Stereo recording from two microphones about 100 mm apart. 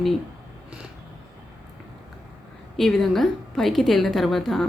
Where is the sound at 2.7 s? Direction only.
5° left (ahead or behind).